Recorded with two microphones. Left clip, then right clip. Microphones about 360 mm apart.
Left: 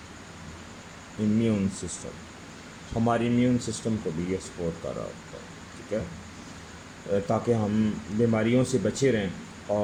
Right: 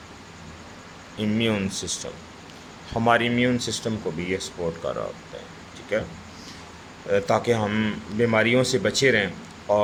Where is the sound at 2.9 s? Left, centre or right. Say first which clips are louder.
Right 5 dB; right.